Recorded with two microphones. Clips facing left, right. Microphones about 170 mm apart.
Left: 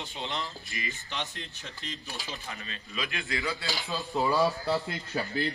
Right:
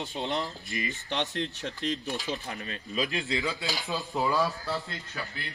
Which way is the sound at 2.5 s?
45° right (ahead or behind).